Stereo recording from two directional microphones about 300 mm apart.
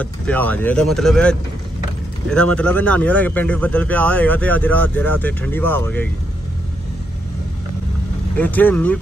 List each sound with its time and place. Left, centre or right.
0.0 s speech: centre
8.4 s speech: centre